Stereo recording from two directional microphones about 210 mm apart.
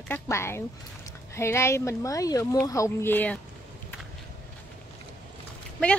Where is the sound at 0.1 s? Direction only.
10° left (ahead or behind).